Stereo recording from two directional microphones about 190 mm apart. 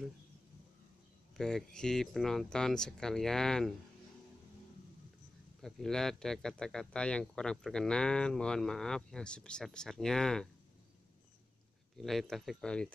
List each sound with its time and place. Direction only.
1.4 s speech: 5° left (ahead or behind)
5.6 s speech: centre (ahead or behind)
12.0 s speech: centre (ahead or behind)